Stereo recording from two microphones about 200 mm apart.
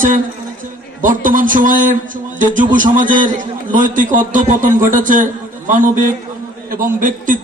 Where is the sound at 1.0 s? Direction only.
40° right (ahead or behind).